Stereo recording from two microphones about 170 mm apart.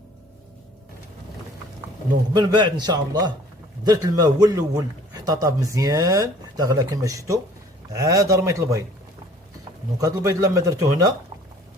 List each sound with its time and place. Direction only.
2.3 s speech: 25° right (ahead or behind)
10.0 s speech: 20° right (ahead or behind)